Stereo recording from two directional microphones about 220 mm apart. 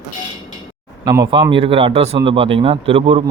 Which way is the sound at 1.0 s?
20° right (ahead or behind).